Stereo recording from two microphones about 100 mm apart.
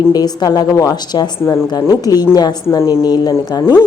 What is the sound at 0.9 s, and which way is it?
Speech, 45° left (ahead or behind).